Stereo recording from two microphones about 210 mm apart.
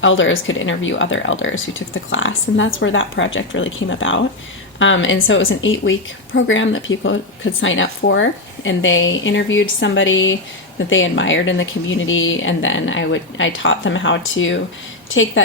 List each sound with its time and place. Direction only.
0.0 s a woman's voice: 65° left (ahead or behind)